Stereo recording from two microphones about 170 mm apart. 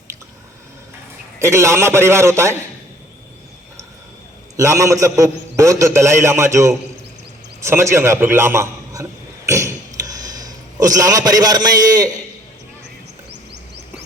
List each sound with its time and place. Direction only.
1.4 s a man's voice: 15° right (ahead or behind)
4.5 s a man's voice: 15° right (ahead or behind)
9.5 s a sound: 20° right (ahead or behind)